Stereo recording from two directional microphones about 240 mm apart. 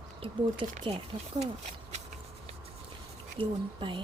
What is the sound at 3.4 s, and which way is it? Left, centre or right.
Speech, right.